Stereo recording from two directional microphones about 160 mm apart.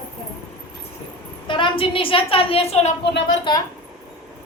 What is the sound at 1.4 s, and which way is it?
A woman's voice, 30° left (ahead or behind).